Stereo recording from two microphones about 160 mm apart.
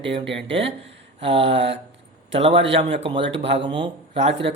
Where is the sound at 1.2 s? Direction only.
35° right (ahead or behind).